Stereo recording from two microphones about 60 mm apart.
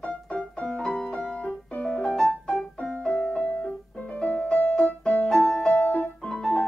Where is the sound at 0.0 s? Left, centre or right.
Centre.